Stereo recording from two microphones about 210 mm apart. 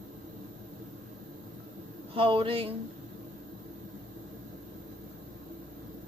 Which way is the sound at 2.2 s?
25° right (ahead or behind).